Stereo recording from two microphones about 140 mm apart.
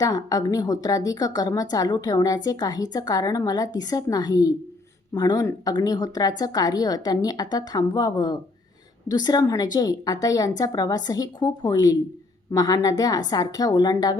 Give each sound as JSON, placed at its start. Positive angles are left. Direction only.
{"t": 0.0, "sound": "a woman's voice", "side_deg": 25}